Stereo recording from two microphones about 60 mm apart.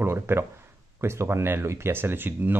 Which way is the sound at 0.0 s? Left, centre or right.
Right.